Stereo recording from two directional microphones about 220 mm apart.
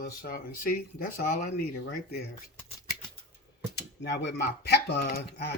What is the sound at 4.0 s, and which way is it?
Speech, 50° left (ahead or behind).